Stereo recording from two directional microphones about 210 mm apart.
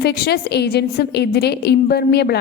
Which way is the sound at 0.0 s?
50° left (ahead or behind).